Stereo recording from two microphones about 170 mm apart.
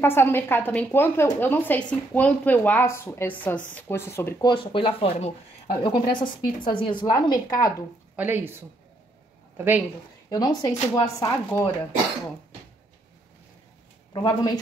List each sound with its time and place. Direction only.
0.0 s a woman's voice: 15° left (ahead or behind)
4.5 s a woman's voice: 30° left (ahead or behind)
8.2 s speech: 10° right (ahead or behind)
10.3 s a woman's voice: 25° left (ahead or behind)
14.1 s a woman's voice: 25° left (ahead or behind)